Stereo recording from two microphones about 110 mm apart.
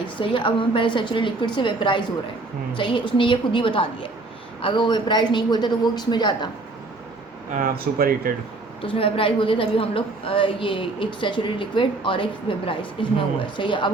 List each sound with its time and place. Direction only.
0.2 s a woman's voice: 50° left (ahead or behind)
8.8 s a woman's voice: 55° left (ahead or behind)